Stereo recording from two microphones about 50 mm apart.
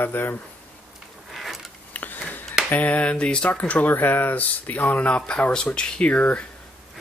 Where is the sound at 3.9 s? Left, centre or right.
Left.